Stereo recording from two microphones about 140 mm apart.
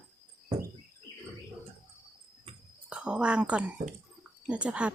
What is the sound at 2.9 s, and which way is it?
A woman's voice, 10° right (ahead or behind).